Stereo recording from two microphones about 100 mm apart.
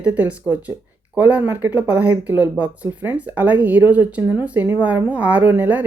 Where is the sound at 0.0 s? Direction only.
15° right (ahead or behind).